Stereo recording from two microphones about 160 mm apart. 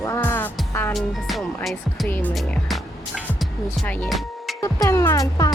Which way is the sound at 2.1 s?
10° left (ahead or behind).